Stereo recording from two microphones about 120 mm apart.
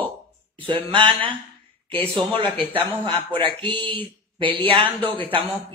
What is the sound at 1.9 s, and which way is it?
A man's voice, 50° right (ahead or behind).